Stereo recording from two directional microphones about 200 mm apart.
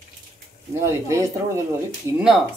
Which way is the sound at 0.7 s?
15° right (ahead or behind).